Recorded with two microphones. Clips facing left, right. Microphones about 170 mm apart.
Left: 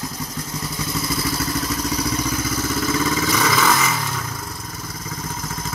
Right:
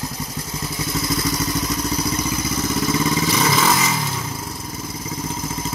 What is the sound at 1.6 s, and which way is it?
Vehicle, 10° right (ahead or behind).